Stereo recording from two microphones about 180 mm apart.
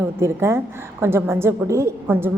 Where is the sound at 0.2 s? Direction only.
15° right (ahead or behind).